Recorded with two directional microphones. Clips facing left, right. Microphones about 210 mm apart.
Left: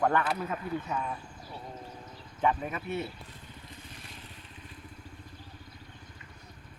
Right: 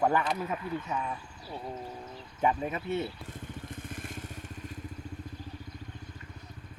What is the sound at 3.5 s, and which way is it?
Vehicle, 50° right (ahead or behind).